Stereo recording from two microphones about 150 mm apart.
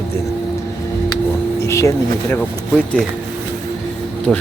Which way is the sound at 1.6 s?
20° left (ahead or behind).